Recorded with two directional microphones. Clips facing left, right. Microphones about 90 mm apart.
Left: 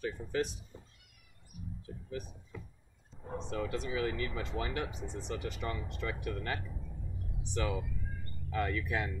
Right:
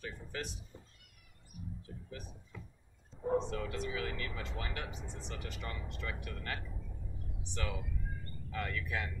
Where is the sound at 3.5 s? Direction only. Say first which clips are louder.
Left 2 dB; 20° left (ahead or behind).